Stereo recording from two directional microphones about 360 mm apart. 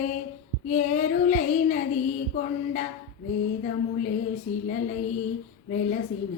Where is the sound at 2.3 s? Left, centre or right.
Left.